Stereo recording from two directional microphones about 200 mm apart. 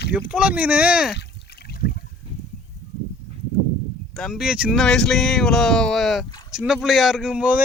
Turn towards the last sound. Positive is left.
turn(degrees=-5)  # may be behind; listen again after turning